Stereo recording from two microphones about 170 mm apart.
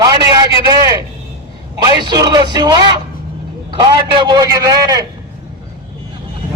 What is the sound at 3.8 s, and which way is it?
A man's voice, 25° right (ahead or behind).